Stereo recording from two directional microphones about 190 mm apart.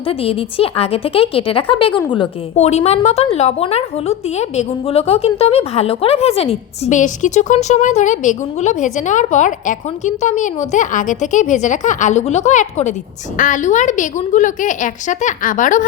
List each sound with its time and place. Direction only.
0.1 s a woman's voice: 30° left (ahead or behind)